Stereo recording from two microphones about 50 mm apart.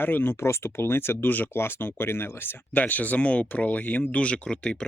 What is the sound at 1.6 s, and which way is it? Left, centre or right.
Speech, left.